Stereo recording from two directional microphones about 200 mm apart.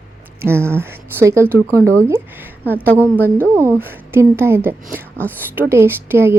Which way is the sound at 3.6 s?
10° right (ahead or behind).